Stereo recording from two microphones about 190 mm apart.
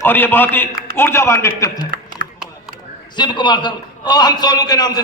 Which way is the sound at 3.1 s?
25° left (ahead or behind).